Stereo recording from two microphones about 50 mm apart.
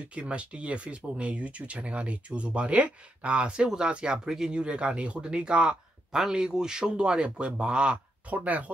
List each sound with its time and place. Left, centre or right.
0.1 s speech: right